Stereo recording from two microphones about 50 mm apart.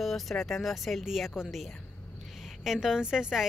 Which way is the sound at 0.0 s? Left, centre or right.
Centre.